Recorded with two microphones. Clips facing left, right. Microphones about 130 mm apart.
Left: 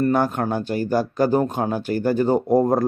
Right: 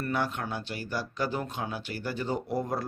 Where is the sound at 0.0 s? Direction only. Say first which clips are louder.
Left 11 dB; 45° left (ahead or behind).